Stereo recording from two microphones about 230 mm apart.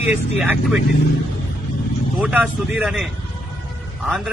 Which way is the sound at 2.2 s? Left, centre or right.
Centre.